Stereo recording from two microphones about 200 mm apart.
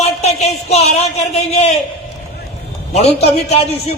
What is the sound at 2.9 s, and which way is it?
Speech, 30° left (ahead or behind).